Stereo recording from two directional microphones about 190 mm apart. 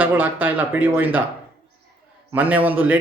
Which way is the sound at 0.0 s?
10° right (ahead or behind).